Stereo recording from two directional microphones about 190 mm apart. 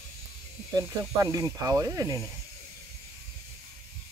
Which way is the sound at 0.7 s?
20° right (ahead or behind).